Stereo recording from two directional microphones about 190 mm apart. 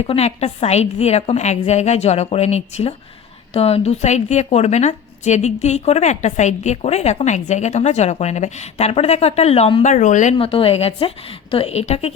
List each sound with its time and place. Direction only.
0.0 s a woman's voice: 35° left (ahead or behind)
10.3 s a woman's voice: 30° left (ahead or behind)